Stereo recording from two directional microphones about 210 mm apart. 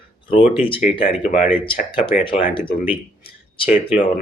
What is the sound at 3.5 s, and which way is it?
Speech, 25° left (ahead or behind).